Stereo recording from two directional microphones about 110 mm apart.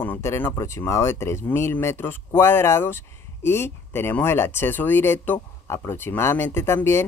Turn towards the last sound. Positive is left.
turn(degrees=25)  # may be behind; listen again after turning